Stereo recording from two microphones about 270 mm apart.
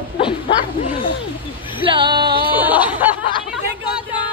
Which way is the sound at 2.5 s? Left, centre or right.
Centre.